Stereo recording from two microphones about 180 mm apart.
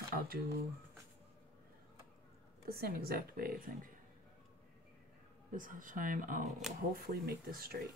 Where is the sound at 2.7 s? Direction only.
60° right (ahead or behind).